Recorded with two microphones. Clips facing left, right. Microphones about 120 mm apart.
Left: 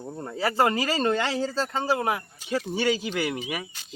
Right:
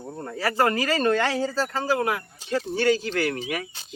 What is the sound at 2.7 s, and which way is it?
Speech, 10° left (ahead or behind).